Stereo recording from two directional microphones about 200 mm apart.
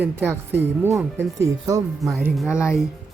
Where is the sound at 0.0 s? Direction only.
10° right (ahead or behind).